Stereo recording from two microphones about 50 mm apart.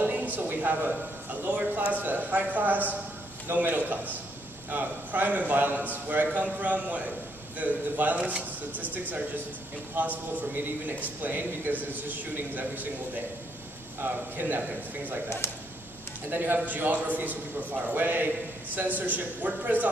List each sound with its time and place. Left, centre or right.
0.0 s a sound: right
0.4 s a woman's voice: right
9.9 s a man's voice: right
15.4 s speech: left
16.3 s a man's voice: right